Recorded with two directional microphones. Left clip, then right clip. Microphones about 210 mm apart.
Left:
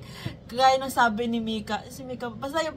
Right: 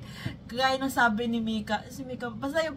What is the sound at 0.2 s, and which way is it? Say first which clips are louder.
A woman's voice: left 6 dB; 10° left (ahead or behind).